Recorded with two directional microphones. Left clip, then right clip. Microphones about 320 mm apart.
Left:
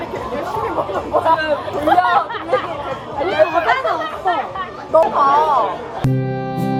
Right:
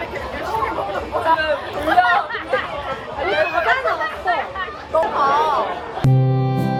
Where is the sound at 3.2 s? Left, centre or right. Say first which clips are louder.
Left 3 dB; left.